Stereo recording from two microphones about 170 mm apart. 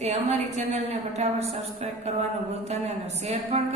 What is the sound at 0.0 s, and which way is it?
A woman's voice, 40° right (ahead or behind).